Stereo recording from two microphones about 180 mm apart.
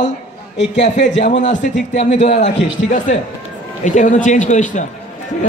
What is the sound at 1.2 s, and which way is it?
A man's voice, 45° left (ahead or behind).